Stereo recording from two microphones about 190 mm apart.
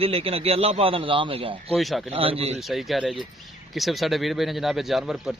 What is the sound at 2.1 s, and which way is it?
Speech, 30° right (ahead or behind).